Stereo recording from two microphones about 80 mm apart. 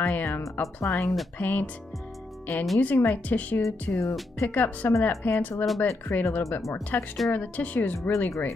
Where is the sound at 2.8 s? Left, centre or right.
Left.